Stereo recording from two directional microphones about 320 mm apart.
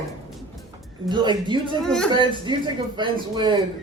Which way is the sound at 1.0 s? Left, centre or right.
Centre.